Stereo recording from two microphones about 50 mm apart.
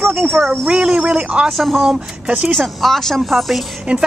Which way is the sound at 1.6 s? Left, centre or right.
Centre.